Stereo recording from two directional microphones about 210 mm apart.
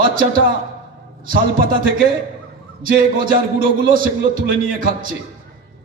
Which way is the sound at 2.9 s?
40° right (ahead or behind).